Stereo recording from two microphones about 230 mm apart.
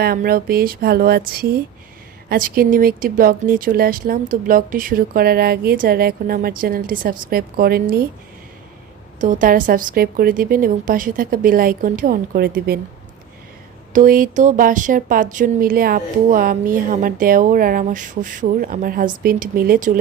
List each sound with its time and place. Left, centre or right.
0.0 s speech: right
9.2 s speech: right
13.9 s speech: right